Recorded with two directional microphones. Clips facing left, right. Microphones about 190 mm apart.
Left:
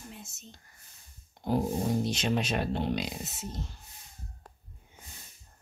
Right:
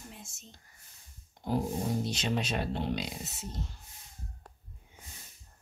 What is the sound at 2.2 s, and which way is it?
Speech, 55° left (ahead or behind).